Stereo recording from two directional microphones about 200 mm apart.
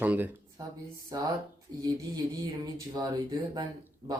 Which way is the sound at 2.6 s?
20° right (ahead or behind).